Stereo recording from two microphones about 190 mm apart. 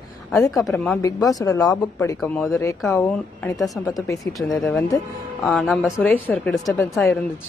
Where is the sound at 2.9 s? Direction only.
15° left (ahead or behind).